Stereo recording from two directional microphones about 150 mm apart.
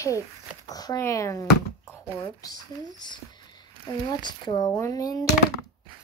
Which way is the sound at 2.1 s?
25° left (ahead or behind).